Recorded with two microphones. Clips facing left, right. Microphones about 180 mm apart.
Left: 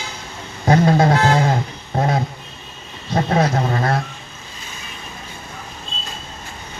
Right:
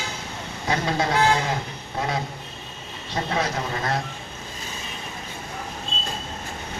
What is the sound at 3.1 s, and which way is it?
Speech, 50° left (ahead or behind).